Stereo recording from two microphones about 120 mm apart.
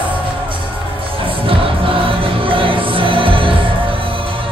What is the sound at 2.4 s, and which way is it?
Music, 45° right (ahead or behind).